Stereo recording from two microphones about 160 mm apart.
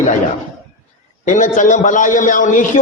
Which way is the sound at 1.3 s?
55° left (ahead or behind).